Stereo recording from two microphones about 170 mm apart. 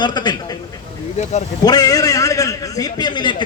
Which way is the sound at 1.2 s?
40° left (ahead or behind).